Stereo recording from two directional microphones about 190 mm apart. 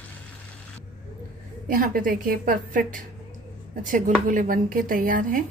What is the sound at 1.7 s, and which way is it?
A woman's voice, 50° right (ahead or behind).